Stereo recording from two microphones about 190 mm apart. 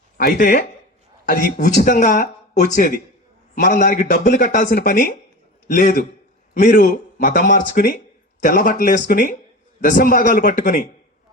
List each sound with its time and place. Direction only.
0.2 s speech: 50° left (ahead or behind)